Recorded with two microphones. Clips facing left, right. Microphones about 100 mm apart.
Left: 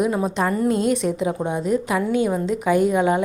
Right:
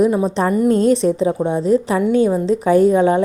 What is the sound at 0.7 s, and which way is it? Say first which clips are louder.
Speech: right 8 dB; 40° right (ahead or behind).